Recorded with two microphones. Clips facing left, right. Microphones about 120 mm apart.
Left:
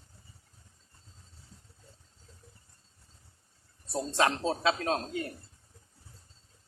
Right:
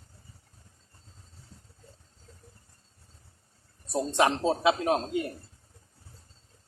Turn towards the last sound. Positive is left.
turn(degrees=-20)  # may be behind; listen again after turning